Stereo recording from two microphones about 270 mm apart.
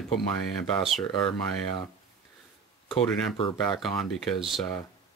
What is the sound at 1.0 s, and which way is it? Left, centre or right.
Speech, centre.